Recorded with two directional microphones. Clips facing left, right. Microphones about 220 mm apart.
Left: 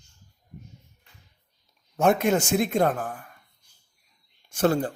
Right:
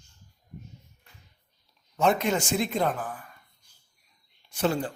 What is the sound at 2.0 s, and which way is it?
Speech, 50° left (ahead or behind).